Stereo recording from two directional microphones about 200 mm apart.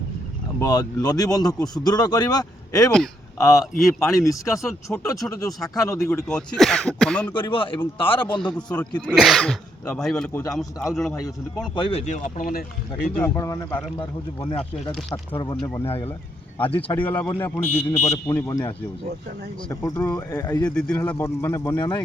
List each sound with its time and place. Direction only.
0.6 s a man's voice: 20° left (ahead or behind)
7.3 s speech: 25° left (ahead or behind)
8.5 s speech: 5° left (ahead or behind)
11.7 s speech: 25° left (ahead or behind); by 12.6 s 45° left (ahead or behind)
13.1 s speech: 10° left (ahead or behind)
14.0 s speech: 25° left (ahead or behind)
17.1 s speech: 10° left (ahead or behind)
19.8 s speech: 15° left (ahead or behind)
20.7 s speech: 5° left (ahead or behind); by 22.0 s 20° left (ahead or behind)